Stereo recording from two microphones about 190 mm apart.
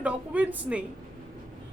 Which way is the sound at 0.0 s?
5° right (ahead or behind).